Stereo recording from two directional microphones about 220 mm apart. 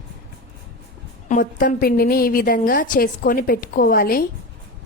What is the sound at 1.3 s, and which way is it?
A woman's voice, 35° left (ahead or behind).